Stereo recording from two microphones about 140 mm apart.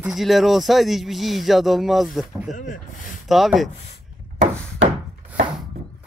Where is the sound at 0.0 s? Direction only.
Centre (ahead or behind).